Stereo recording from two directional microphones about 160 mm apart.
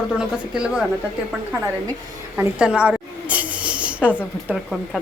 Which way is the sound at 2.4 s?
5° right (ahead or behind).